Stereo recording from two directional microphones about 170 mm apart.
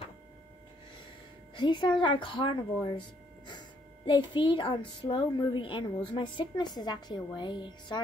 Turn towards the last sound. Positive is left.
turn(degrees=25)  # may be behind; listen again after turning